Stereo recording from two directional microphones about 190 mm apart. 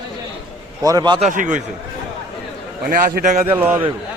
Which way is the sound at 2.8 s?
45° right (ahead or behind).